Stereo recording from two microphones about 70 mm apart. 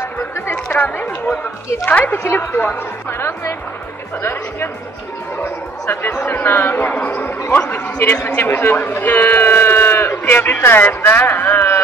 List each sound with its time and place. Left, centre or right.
0.7 s a woman's voice: left